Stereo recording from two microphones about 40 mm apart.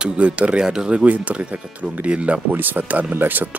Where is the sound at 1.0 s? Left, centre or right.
Right.